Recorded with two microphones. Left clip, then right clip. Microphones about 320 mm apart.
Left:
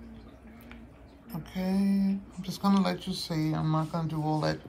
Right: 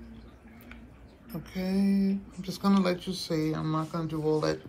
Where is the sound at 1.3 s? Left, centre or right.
Left.